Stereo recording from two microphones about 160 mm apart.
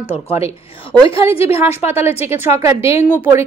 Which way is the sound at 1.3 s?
40° left (ahead or behind).